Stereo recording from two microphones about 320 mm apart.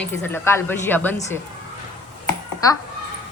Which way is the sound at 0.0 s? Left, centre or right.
Centre.